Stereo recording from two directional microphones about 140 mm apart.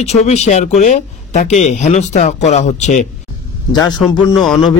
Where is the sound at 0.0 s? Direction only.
50° left (ahead or behind).